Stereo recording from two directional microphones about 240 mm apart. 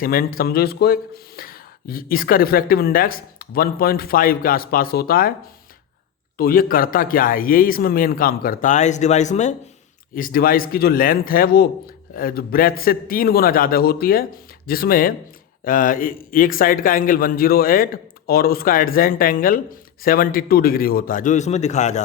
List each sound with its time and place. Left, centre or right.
0.0 s a man's voice: left
6.3 s a man's voice: left